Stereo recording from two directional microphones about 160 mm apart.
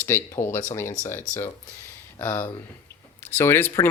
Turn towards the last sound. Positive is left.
turn(degrees=15)  # may be behind; listen again after turning